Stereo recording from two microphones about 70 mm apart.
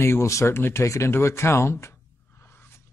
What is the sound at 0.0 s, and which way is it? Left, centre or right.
Speech, left.